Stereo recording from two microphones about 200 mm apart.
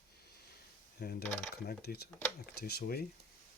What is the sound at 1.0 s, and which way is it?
Speech, 50° left (ahead or behind).